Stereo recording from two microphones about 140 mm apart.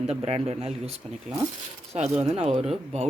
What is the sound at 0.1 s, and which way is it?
Speech, 45° right (ahead or behind).